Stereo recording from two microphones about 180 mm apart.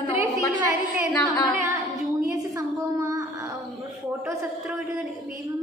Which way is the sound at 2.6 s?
20° right (ahead or behind).